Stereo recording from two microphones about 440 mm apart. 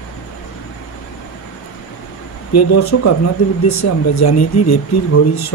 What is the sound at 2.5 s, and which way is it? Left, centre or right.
Speech, left.